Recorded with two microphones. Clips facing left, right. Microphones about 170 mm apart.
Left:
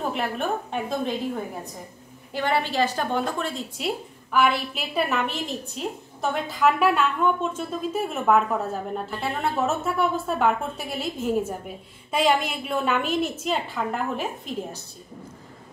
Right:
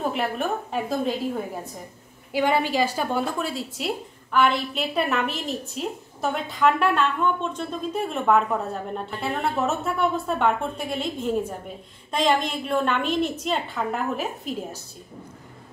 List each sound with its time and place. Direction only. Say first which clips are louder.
0.1 s a woman's voice: right 1 dB; 5° right (ahead or behind)
2.3 s a woman's voice: right 2 dB; 10° right (ahead or behind)